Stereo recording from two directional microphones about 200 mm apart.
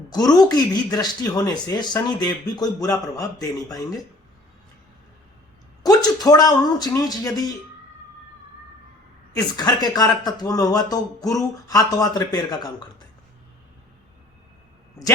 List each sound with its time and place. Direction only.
0.1 s speech: 20° left (ahead or behind)
5.8 s speech: 20° left (ahead or behind)
9.3 s speech: 20° left (ahead or behind)